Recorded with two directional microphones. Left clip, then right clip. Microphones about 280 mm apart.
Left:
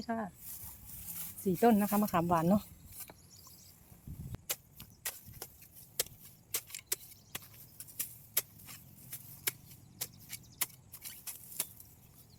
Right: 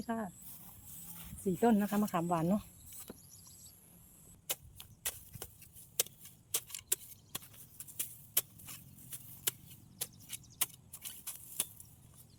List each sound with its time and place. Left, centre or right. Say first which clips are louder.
0.0 s speech: left 2 dB; centre
1.5 s speech: left 3 dB; centre
4.4 s a sound: even; centre
10.0 s vehicle: left 1 dB; centre